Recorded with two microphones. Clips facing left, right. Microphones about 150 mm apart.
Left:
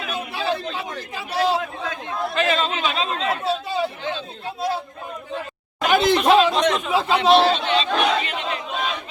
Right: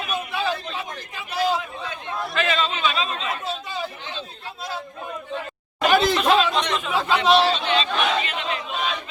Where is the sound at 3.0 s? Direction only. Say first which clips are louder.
Left 4 dB; 75° left (ahead or behind).